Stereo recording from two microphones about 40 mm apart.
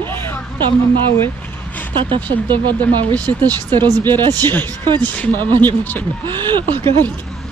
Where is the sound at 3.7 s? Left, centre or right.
Left.